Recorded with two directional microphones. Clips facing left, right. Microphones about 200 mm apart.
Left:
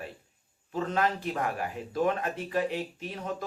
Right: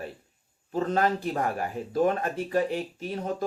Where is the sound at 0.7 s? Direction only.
40° right (ahead or behind).